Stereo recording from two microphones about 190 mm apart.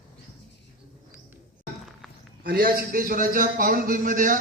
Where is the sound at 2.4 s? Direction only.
50° right (ahead or behind).